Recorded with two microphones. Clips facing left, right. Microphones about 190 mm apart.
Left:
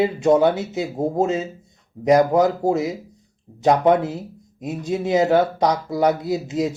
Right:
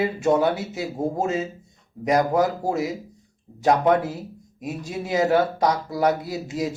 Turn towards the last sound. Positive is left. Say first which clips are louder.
# left 5 dB
turn(degrees=20)  # may be behind; listen again after turning